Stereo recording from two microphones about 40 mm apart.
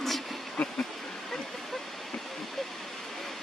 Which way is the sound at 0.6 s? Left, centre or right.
Left.